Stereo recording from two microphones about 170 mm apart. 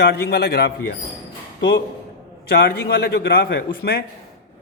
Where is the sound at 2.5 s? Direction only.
65° left (ahead or behind).